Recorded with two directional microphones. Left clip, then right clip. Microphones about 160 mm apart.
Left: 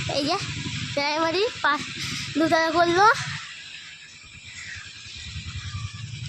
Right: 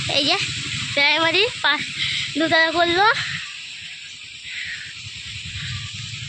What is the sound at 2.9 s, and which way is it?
Speech, 10° right (ahead or behind).